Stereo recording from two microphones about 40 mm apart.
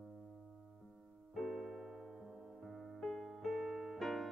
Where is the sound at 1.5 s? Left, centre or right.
Centre.